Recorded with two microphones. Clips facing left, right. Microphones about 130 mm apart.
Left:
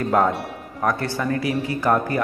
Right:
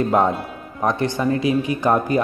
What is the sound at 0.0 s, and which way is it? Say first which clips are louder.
A man's voice: right 2 dB; 20° right (ahead or behind).